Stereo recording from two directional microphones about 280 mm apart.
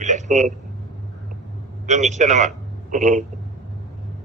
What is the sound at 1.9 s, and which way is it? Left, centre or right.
A man's voice, right.